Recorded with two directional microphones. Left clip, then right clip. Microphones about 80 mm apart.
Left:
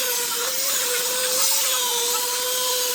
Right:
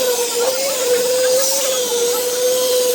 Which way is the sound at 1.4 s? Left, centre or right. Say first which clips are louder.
Right 5 dB; centre.